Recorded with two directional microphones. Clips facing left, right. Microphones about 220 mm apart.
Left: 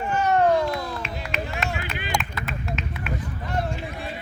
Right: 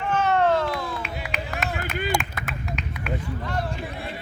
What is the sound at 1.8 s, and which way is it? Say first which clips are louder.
Run: right 5 dB; 45° right (ahead or behind).